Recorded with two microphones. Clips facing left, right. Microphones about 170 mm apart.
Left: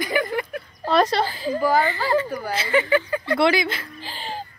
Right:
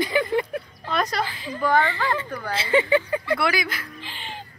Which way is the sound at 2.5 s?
25° right (ahead or behind).